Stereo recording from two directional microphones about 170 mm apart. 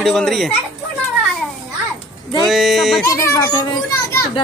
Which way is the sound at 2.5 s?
Centre (ahead or behind).